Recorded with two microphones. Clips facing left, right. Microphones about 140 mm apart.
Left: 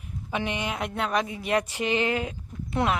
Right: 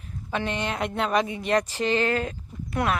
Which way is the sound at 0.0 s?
15° left (ahead or behind).